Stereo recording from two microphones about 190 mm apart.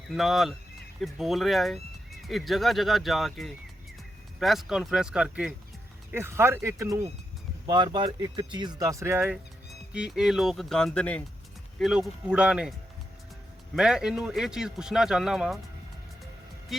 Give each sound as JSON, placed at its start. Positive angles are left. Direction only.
{"t": 0.1, "sound": "speech", "side_deg": 0}
{"t": 13.7, "sound": "speech", "side_deg": -5}